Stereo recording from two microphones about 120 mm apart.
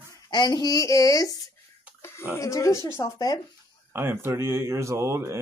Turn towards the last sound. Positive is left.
turn(degrees=-25)  # may be behind; listen again after turning